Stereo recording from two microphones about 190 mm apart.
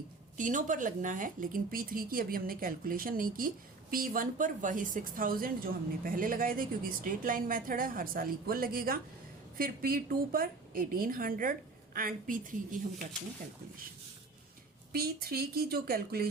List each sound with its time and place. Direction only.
0.3 s a woman's voice: 45° right (ahead or behind)
14.9 s a woman's voice: 50° right (ahead or behind)